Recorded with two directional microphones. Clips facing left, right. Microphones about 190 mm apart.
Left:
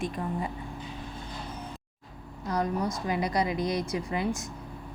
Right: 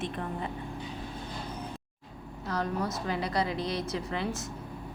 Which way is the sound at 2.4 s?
15° left (ahead or behind).